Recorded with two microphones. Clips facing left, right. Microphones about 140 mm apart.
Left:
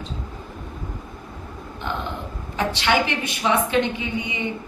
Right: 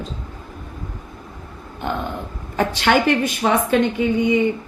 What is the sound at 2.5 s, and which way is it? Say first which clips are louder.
A woman's voice: right 4 dB; 45° right (ahead or behind).